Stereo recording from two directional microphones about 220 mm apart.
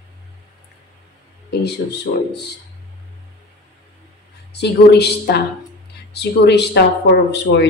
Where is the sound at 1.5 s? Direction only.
50° left (ahead or behind).